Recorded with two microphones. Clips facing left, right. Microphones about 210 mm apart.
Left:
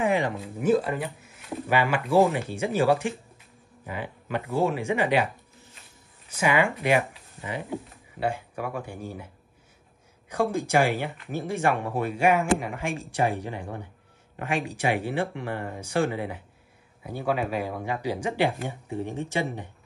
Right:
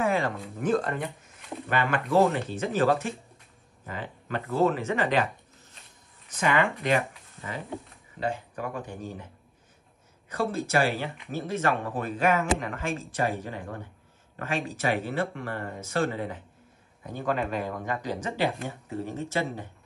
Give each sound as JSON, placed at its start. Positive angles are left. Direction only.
{"t": 0.0, "sound": "speech", "side_deg": 15}
{"t": 6.3, "sound": "speech", "side_deg": 10}
{"t": 10.3, "sound": "speech", "side_deg": 15}